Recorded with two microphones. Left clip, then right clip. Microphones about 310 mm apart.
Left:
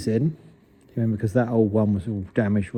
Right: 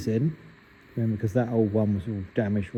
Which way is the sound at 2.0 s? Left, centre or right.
Centre.